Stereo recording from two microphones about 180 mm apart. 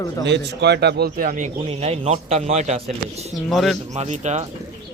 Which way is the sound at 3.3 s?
Centre (ahead or behind).